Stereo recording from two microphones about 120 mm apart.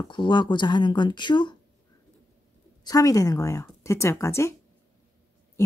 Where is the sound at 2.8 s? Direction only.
30° left (ahead or behind).